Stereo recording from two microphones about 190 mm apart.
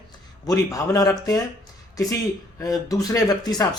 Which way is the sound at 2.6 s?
20° left (ahead or behind).